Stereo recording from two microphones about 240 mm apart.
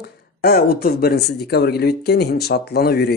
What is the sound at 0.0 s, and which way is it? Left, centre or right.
Speech, left.